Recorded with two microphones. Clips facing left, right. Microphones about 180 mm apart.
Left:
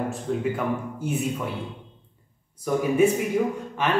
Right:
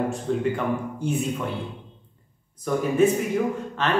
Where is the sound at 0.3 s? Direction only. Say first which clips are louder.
Right 1 dB; centre (ahead or behind).